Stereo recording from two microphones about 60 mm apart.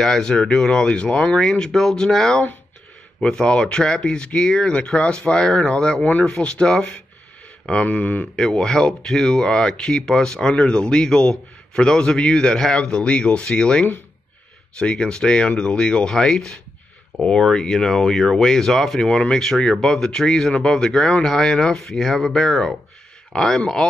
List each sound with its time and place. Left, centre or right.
0.0 s speech: centre
7.9 s a man's voice: left
8.4 s speech: centre